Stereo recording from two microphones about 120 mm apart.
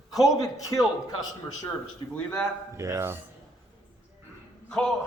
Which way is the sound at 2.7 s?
25° right (ahead or behind).